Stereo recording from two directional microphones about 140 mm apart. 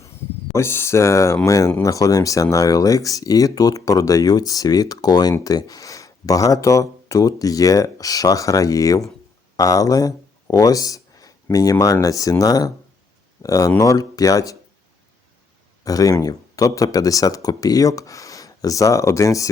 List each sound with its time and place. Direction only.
0.5 s speech: 15° left (ahead or behind)
15.8 s speech: 25° left (ahead or behind)